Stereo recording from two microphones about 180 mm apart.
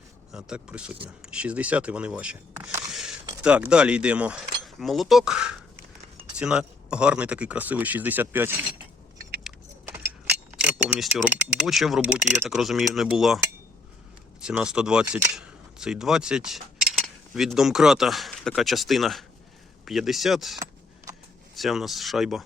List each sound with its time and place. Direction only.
0.3 s speech: 5° right (ahead or behind)
2.9 s zipper: centre (ahead or behind)
3.4 s speech: 5° right (ahead or behind)
11.0 s speech: centre (ahead or behind)
14.4 s speech: 5° right (ahead or behind)
20.6 s keys jangling: 20° right (ahead or behind)
21.5 s speech: centre (ahead or behind)